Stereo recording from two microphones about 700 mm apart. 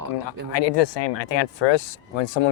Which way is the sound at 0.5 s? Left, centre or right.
Left.